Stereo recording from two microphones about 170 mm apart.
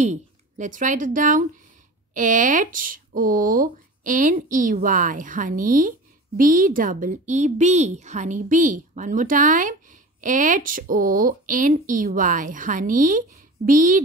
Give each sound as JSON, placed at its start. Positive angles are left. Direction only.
{"t": 0.0, "sound": "a woman's voice", "side_deg": -45}